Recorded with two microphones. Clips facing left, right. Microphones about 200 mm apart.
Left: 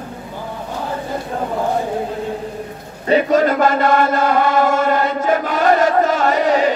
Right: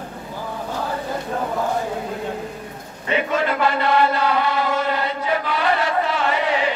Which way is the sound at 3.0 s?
40° left (ahead or behind).